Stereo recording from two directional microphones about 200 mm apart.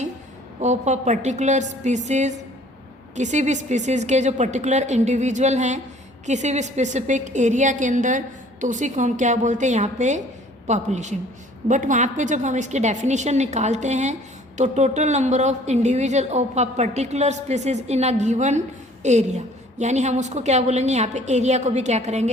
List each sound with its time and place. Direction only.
0.6 s a woman's voice: 35° right (ahead or behind)